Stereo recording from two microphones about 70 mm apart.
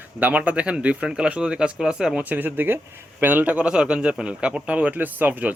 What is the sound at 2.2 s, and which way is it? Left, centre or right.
A man's voice, right.